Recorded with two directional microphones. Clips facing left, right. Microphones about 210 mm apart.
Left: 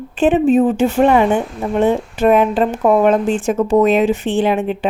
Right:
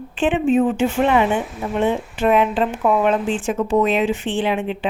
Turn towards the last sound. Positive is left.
turn(degrees=45)  # may be behind; listen again after turning